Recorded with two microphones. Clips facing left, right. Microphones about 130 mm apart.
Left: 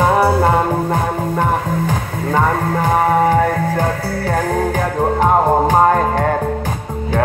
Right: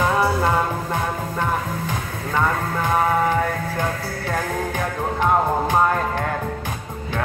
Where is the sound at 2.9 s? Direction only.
45° left (ahead or behind).